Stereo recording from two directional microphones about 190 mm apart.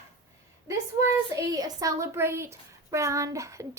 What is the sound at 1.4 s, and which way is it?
Speech, 20° right (ahead or behind).